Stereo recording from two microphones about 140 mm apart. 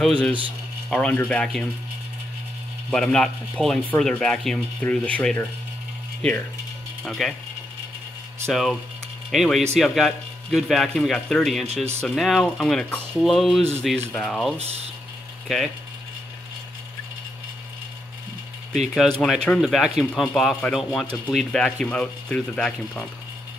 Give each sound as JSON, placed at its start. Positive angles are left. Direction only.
{"t": 0.0, "sound": "speech", "side_deg": 5}
{"t": 2.9, "sound": "speech", "side_deg": 5}
{"t": 8.5, "sound": "speech", "side_deg": 0}
{"t": 11.6, "sound": "speech", "side_deg": -50}
{"t": 12.0, "sound": "speech", "side_deg": 0}
{"t": 18.9, "sound": "speech", "side_deg": 0}